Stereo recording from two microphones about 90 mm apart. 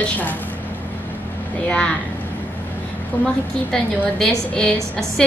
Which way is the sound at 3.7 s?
5° left (ahead or behind).